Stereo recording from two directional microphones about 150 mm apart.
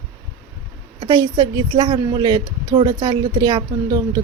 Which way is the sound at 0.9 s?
30° right (ahead or behind).